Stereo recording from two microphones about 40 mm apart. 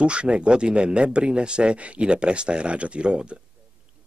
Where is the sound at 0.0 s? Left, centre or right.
Right.